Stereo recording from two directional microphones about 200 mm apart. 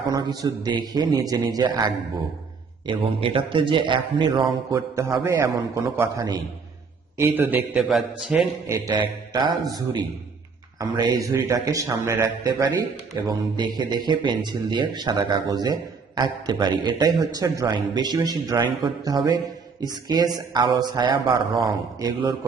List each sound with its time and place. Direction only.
0.1 s a man's voice: 20° right (ahead or behind); by 8.4 s centre (ahead or behind)
8.6 s a man's voice: 15° right (ahead or behind)